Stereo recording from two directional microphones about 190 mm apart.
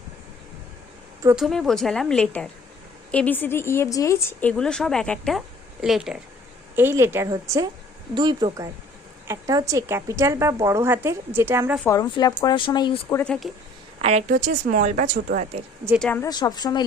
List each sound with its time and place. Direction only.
1.4 s a woman's voice: centre (ahead or behind)
11.9 s speech: 20° left (ahead or behind)
13.1 s speech: 5° left (ahead or behind)
14.0 s speech: 35° right (ahead or behind)
16.0 s a woman's voice: 5° left (ahead or behind)
16.2 s speech: 20° left (ahead or behind)